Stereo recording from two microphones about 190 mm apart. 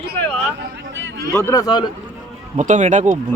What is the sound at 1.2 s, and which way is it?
Speech, 15° left (ahead or behind).